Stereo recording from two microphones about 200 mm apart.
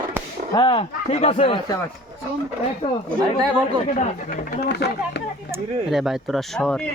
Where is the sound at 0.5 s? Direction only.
25° left (ahead or behind).